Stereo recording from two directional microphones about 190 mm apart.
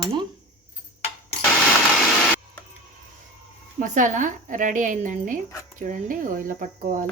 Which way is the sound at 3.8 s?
40° right (ahead or behind).